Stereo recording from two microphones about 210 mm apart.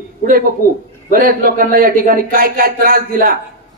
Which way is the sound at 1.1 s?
40° right (ahead or behind).